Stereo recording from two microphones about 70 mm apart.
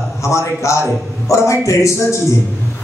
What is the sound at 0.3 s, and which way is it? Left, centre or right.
A man's voice, left.